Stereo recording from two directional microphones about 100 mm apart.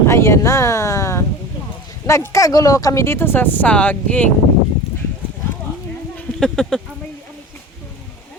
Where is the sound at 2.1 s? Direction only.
30° left (ahead or behind); by 4.2 s 15° left (ahead or behind).